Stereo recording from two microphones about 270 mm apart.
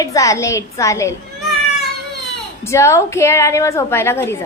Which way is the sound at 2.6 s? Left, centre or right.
Centre.